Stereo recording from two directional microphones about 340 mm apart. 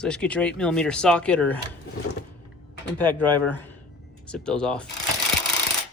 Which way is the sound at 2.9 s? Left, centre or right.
Centre.